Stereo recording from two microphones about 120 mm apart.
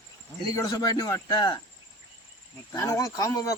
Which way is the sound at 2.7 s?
25° left (ahead or behind).